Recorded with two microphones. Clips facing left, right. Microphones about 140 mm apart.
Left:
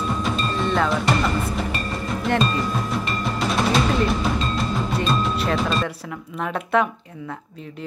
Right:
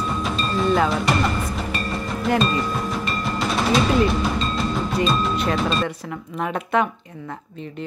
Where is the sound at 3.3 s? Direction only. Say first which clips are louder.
Right 1 dB; centre (ahead or behind).